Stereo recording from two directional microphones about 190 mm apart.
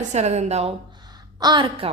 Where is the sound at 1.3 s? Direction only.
20° right (ahead or behind).